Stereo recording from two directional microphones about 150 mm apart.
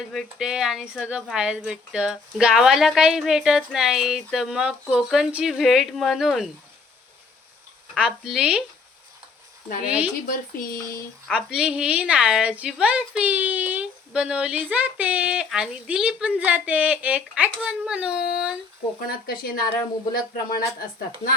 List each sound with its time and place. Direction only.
0.0 s speech: centre (ahead or behind)
7.9 s speech: 5° right (ahead or behind)
9.8 s a woman's voice: 5° right (ahead or behind)
10.2 s speech: 65° left (ahead or behind)
11.3 s a woman's voice: 5° right (ahead or behind)
19.0 s speech: 75° left (ahead or behind)
20.7 s speech: 75° left (ahead or behind)